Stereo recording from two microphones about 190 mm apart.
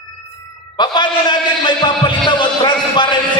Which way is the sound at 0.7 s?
25° left (ahead or behind).